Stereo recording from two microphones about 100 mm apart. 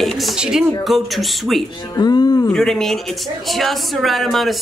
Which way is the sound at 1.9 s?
40° left (ahead or behind).